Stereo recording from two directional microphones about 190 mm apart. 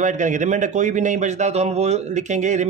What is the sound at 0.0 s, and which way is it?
Speech, 40° right (ahead or behind).